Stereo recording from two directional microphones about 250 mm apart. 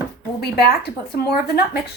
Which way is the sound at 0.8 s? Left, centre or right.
Left.